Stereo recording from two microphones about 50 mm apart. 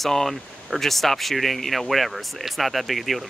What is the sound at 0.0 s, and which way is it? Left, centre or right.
Speech, centre.